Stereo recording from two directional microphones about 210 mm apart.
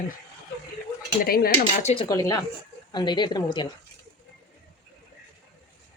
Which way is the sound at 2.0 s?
15° left (ahead or behind).